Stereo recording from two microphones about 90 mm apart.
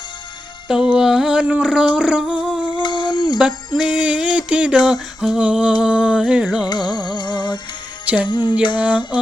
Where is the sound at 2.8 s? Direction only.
55° left (ahead or behind).